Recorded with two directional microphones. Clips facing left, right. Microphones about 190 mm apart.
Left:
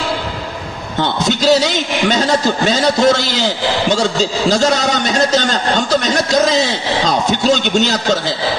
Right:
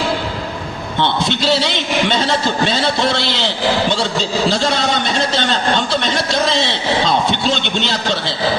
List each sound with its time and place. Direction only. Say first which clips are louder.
1.0 s a man's voice: left 3 dB; 45° left (ahead or behind)